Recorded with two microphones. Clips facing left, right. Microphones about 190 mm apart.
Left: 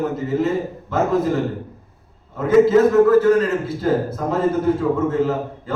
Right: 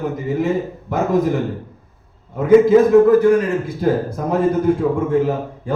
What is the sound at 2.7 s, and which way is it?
Speech, 15° right (ahead or behind).